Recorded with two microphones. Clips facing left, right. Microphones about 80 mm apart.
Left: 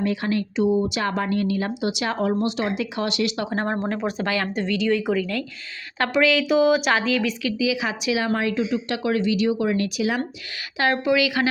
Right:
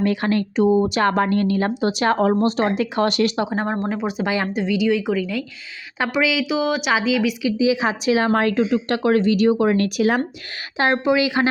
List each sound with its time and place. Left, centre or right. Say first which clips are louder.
0.0 s speech: right 4 dB; right
3.5 s speech: right 2 dB; centre
7.5 s speech: right 5 dB; right
10.8 s a woman's voice: right 2 dB; right